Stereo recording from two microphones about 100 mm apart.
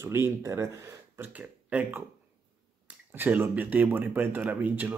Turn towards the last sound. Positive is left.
turn(degrees=-20)  # may be behind; listen again after turning